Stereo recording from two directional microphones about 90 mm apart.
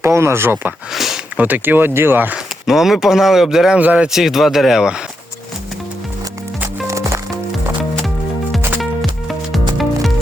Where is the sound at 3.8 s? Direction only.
15° right (ahead or behind).